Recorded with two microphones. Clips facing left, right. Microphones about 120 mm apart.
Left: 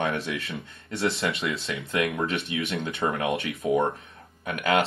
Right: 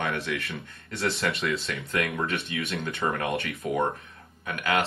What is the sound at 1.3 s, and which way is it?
Speech, centre (ahead or behind).